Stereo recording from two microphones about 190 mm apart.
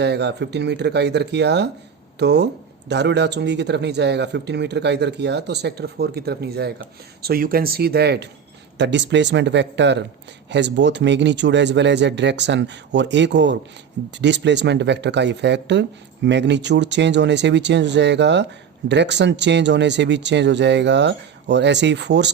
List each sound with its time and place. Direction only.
0.0 s speech: 60° right (ahead or behind)